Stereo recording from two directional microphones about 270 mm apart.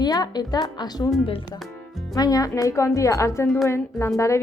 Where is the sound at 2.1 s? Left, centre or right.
Centre.